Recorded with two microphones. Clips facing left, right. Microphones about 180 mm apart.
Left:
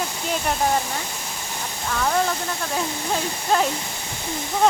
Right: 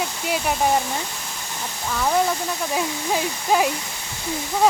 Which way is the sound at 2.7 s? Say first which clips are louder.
Right 2 dB; 10° right (ahead or behind).